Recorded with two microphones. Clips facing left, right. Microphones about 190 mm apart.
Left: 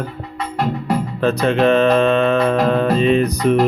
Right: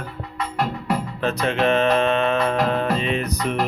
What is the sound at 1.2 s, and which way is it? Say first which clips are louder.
Music: left 7 dB; 35° left (ahead or behind).